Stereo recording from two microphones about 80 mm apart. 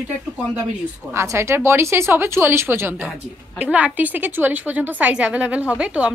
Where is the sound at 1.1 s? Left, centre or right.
Right.